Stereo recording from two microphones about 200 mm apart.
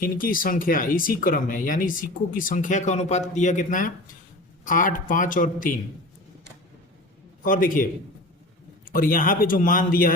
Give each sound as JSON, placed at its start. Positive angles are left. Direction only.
{"t": 0.0, "sound": "speech", "side_deg": 45}
{"t": 7.4, "sound": "speech", "side_deg": 45}
{"t": 8.9, "sound": "speech", "side_deg": 45}